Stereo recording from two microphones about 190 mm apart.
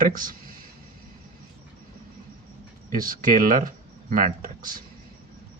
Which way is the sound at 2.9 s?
45° right (ahead or behind).